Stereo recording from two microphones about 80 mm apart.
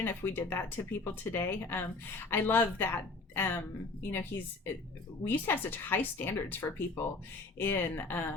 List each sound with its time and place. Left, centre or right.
0.0 s speech: left